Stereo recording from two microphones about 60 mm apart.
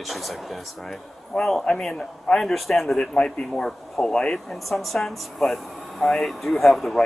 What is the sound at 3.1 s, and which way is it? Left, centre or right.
A man's voice, centre.